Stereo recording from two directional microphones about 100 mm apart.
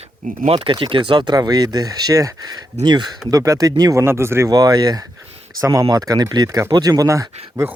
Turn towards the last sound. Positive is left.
turn(degrees=-30)  # may be behind; listen again after turning